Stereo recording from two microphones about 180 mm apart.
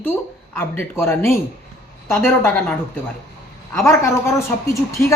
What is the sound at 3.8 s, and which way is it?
Speech, 15° left (ahead or behind).